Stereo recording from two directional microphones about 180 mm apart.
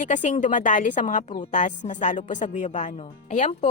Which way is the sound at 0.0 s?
40° left (ahead or behind).